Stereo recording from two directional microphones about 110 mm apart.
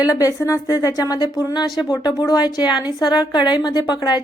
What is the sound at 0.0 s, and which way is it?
A woman's voice, 30° left (ahead or behind).